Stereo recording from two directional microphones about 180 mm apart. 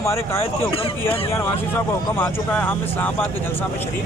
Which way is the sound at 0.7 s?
30° left (ahead or behind).